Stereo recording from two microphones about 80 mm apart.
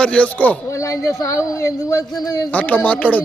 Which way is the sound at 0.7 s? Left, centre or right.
Left.